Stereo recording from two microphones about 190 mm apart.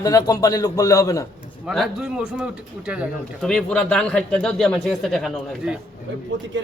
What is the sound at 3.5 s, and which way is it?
A man's voice, 5° left (ahead or behind).